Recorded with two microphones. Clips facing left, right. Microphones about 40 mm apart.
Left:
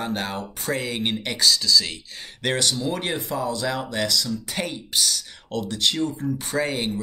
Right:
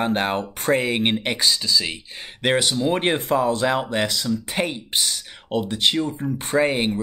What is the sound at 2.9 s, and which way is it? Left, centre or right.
Speech, right.